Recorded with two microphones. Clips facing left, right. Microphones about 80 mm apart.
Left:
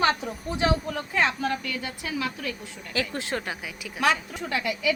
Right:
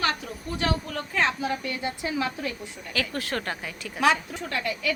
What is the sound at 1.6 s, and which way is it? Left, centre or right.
Speech, right.